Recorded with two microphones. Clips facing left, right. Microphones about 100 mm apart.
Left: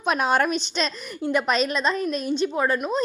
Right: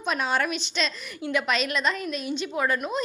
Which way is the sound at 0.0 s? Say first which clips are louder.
Left 5 dB; 55° left (ahead or behind).